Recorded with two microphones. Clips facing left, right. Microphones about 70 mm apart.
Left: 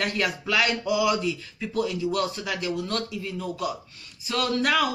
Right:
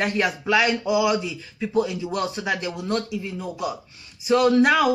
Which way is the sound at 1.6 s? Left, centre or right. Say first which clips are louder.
Right 4 dB; centre.